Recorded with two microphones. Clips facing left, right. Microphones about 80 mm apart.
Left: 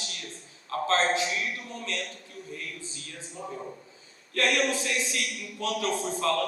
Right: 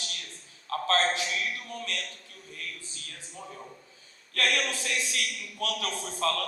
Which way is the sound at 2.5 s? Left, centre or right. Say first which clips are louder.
Right 1 dB; left.